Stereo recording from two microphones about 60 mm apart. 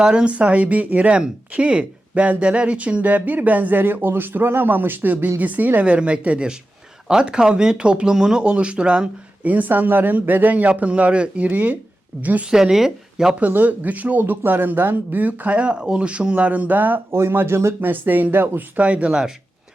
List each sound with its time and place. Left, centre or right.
0.0 s speech: centre
9.4 s speech: right
12.5 s speech: centre
13.4 s speech: right
17.2 s speech: right
17.8 s speech: right
18.8 s speech: right